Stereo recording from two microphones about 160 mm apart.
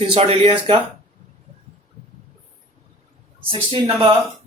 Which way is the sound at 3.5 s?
30° right (ahead or behind).